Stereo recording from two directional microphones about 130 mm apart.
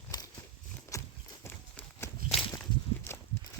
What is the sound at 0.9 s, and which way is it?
Horse, 25° left (ahead or behind).